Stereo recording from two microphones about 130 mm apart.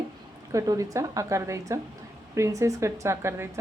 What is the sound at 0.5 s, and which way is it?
A woman's voice, 25° right (ahead or behind).